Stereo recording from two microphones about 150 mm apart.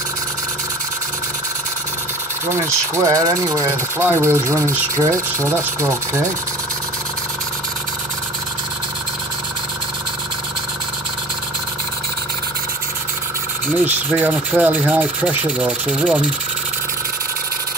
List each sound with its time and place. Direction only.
2.5 s speech: 20° right (ahead or behind)
13.7 s speech: 10° right (ahead or behind)